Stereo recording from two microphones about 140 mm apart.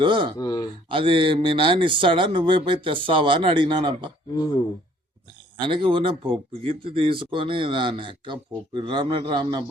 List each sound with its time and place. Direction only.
0.0 s speech: 35° right (ahead or behind)
0.3 s speech: 25° left (ahead or behind)
0.9 s speech: 40° right (ahead or behind)
5.5 s speech: 35° right (ahead or behind)